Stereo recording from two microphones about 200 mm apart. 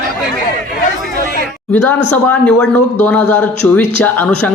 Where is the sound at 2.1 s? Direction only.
5° left (ahead or behind).